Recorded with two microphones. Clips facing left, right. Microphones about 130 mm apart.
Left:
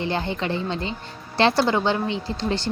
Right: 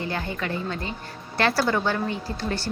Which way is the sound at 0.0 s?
25° left (ahead or behind).